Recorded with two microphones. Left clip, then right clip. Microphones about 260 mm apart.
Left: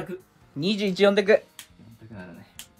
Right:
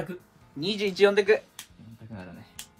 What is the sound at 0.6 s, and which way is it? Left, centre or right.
Speech, left.